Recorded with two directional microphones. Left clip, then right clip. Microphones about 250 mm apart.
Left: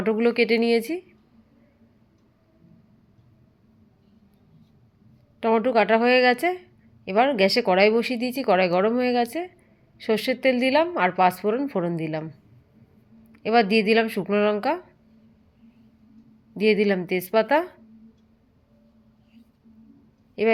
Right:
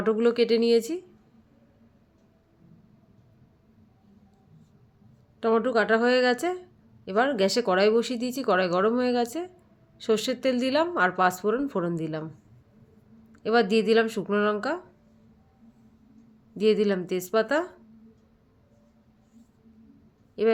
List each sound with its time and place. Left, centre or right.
0.0 s speech: centre
5.4 s speech: centre
13.3 s speech: centre
16.6 s speech: centre
20.4 s speech: centre